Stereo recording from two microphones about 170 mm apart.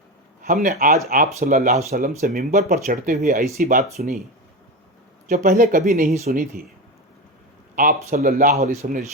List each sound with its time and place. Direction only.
0.4 s speech: 45° right (ahead or behind)
5.3 s speech: 50° right (ahead or behind)
7.8 s speech: 55° right (ahead or behind)